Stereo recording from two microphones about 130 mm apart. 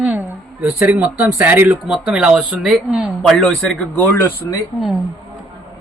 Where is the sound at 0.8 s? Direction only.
10° right (ahead or behind).